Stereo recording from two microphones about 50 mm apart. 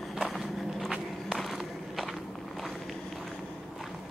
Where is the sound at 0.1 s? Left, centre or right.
Centre.